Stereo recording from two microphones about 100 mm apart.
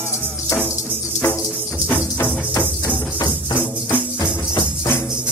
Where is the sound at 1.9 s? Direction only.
25° left (ahead or behind).